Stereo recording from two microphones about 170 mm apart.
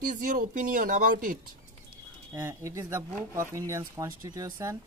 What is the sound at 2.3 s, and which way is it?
Speech, 15° right (ahead or behind).